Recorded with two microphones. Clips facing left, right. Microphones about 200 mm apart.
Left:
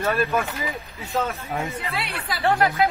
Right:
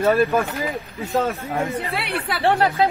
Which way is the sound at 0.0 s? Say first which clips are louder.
Right 5 dB; 30° right (ahead or behind).